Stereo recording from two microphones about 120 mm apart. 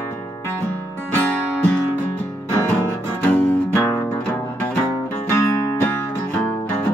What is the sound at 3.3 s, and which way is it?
Music, 20° left (ahead or behind).